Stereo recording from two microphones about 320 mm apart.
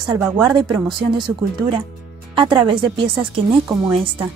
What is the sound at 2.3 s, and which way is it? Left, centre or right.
Speech, centre.